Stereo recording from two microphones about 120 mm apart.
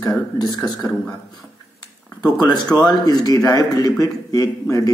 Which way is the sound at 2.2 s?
35° left (ahead or behind).